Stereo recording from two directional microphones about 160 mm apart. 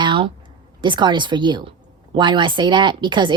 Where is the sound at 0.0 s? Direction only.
30° right (ahead or behind).